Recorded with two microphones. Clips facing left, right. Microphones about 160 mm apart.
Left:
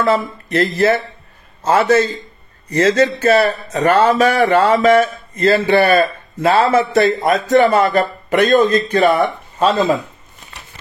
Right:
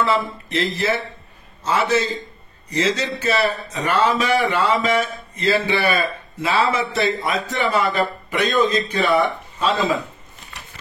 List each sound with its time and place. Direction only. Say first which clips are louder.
0.0 s a man's voice: left 4 dB; 45° left (ahead or behind)